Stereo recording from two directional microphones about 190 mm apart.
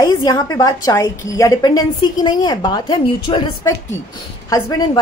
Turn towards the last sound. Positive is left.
turn(degrees=20)  # may be behind; listen again after turning